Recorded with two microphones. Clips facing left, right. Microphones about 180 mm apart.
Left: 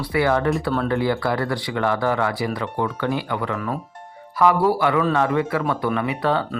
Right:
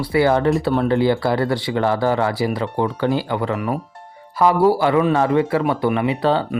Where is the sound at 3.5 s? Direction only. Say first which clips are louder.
Right 4 dB; 15° right (ahead or behind).